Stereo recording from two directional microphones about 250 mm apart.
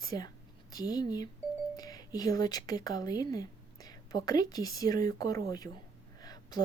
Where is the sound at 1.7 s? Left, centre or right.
Centre.